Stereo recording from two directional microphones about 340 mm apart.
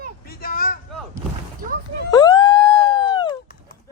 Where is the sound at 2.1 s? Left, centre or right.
Centre.